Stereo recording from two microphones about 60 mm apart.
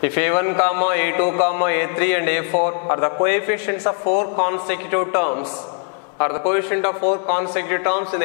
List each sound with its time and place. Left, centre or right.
0.0 s speech: centre